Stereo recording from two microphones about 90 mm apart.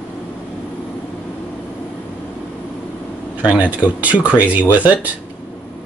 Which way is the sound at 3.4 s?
15° right (ahead or behind).